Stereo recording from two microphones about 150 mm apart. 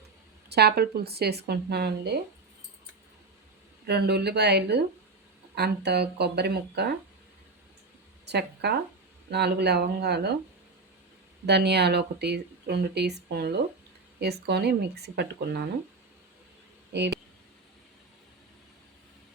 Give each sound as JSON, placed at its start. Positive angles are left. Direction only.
{"t": 0.5, "sound": "speech", "side_deg": -90}
{"t": 3.8, "sound": "speech", "side_deg": -90}
{"t": 8.3, "sound": "speech", "side_deg": -90}
{"t": 11.4, "sound": "speech", "side_deg": -90}